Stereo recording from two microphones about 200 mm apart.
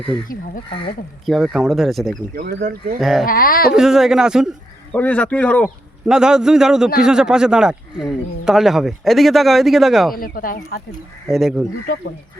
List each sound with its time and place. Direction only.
1.2 s speech: centre (ahead or behind)
2.3 s speech: 50° right (ahead or behind)
3.0 s speech: centre (ahead or behind)
3.2 s speech: 45° left (ahead or behind)
3.8 s speech: centre (ahead or behind)
6.1 s speech: 5° right (ahead or behind)
10.2 s speech: 45° left (ahead or behind)
11.3 s speech: centre (ahead or behind)